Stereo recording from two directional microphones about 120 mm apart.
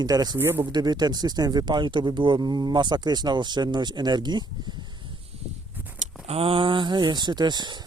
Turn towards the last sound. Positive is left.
turn(degrees=-35)  # may be behind; listen again after turning